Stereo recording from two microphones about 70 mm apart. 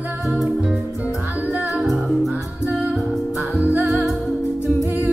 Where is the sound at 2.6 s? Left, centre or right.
Centre.